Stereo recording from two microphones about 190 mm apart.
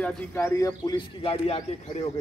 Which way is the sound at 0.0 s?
5° left (ahead or behind).